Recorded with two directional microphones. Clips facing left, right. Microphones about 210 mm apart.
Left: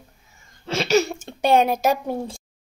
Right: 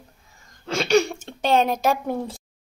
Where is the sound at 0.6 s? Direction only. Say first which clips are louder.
Even; 5° left (ahead or behind).